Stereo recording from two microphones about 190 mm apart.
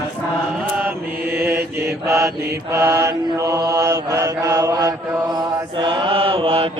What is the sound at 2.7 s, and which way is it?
Mantra, 15° right (ahead or behind).